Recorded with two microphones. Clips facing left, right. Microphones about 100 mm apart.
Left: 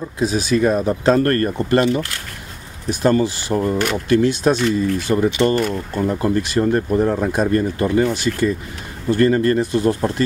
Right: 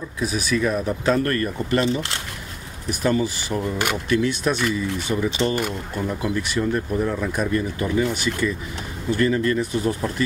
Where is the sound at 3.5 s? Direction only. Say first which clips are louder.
Left 7 dB; 30° left (ahead or behind).